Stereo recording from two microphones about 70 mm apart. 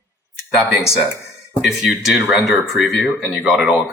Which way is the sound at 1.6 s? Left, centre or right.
Centre.